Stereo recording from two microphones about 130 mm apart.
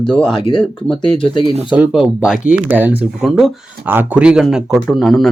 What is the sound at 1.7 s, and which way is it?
Speech, 5° right (ahead or behind).